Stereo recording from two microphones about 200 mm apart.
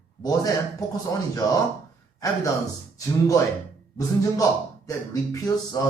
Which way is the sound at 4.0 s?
15° left (ahead or behind).